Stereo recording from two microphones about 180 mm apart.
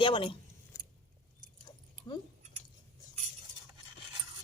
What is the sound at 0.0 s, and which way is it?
Speech, 25° left (ahead or behind).